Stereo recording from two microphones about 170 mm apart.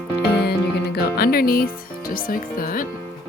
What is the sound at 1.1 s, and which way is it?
Music, 65° left (ahead or behind).